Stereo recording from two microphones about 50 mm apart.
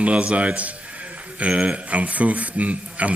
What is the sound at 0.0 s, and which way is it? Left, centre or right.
A man's voice, right.